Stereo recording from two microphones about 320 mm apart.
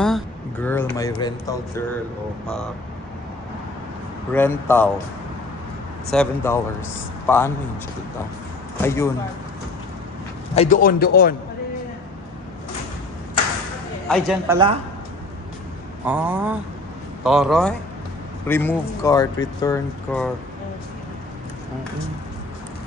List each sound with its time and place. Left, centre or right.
0.0 s a sound: centre
0.9 s a man's voice: centre
4.3 s speech: centre
6.1 s speech: centre
8.8 s speech: centre
10.5 s a man's voice: left
14.0 s speech: centre
14.5 s a woman's voice: centre
16.1 s a man's voice: centre